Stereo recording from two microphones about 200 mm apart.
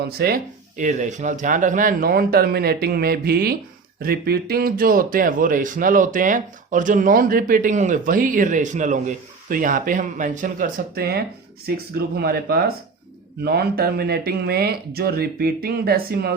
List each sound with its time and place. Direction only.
0.0 s speech: 50° right (ahead or behind)